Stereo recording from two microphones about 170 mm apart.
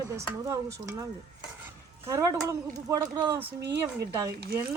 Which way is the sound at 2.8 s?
20° right (ahead or behind).